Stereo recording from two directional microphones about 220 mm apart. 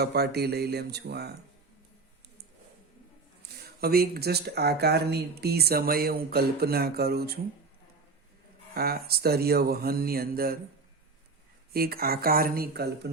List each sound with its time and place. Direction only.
0.0 s speech: 45° right (ahead or behind)
3.4 s a sound: 45° right (ahead or behind)
3.8 s speech: 45° right (ahead or behind)
8.7 s speech: 45° right (ahead or behind)
11.7 s speech: 45° right (ahead or behind)